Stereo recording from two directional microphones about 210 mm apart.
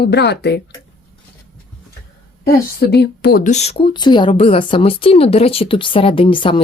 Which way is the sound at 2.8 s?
50° left (ahead or behind).